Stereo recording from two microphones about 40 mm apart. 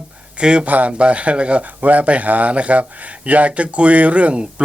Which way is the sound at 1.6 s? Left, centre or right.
Right.